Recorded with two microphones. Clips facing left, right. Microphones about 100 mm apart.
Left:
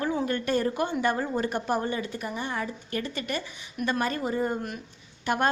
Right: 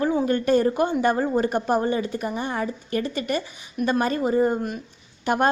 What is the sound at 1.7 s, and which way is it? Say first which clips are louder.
Speech: right 6 dB; 25° right (ahead or behind).